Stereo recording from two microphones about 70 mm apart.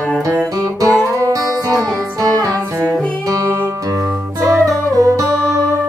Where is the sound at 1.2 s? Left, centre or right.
Right.